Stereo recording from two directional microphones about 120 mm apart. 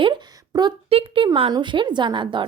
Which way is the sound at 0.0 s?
40° right (ahead or behind).